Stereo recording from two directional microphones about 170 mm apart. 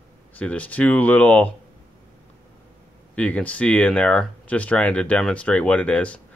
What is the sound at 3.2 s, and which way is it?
Speech, 10° left (ahead or behind).